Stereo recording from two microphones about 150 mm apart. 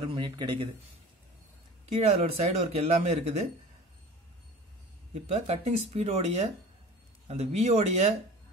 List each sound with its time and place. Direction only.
0.0 s speech: 30° right (ahead or behind)
2.0 s speech: 45° right (ahead or behind)
5.1 s speech: 45° right (ahead or behind)